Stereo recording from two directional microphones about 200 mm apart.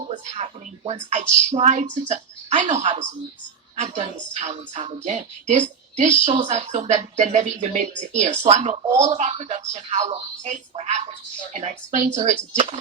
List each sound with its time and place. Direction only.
0.1 s a woman's voice: 30° right (ahead or behind)